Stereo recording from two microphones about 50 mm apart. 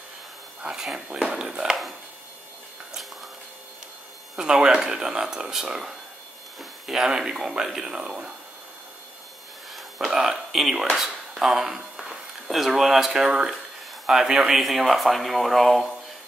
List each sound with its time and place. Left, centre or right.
0.7 s speech: centre
4.4 s speech: centre
9.7 s speech: centre